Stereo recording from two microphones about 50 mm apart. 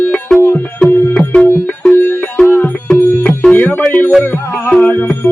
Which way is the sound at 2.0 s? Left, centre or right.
Left.